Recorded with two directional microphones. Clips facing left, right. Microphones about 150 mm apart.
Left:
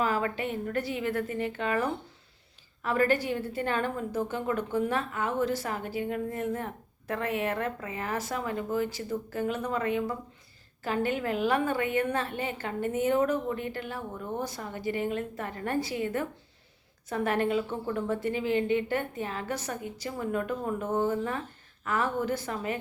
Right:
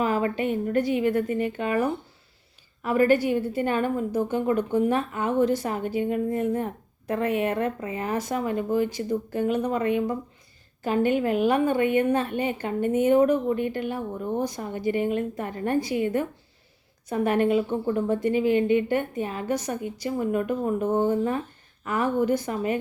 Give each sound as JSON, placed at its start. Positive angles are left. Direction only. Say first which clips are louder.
{"t": 0.0, "sound": "a woman's voice", "louder": "right 5 dB", "side_deg": -20}